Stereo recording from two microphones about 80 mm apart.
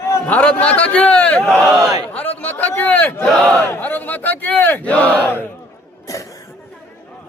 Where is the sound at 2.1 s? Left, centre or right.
Centre.